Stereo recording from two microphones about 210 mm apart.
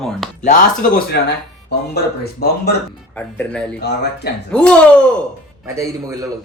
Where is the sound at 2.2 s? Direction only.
50° left (ahead or behind).